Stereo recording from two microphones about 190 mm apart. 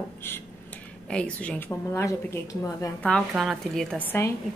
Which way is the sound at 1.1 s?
5° left (ahead or behind).